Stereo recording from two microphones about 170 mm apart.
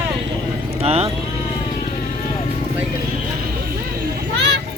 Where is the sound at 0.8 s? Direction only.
35° right (ahead or behind).